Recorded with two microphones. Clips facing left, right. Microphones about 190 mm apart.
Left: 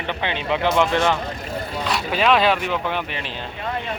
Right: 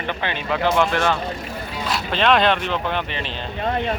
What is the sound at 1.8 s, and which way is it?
Speech, 5° left (ahead or behind).